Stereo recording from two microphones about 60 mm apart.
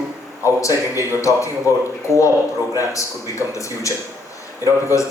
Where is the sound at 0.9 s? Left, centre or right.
Left.